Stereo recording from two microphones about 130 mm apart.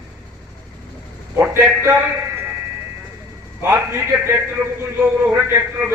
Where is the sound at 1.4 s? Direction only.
20° right (ahead or behind).